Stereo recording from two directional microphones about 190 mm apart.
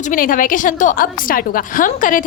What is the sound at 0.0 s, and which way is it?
A woman's voice, 45° left (ahead or behind).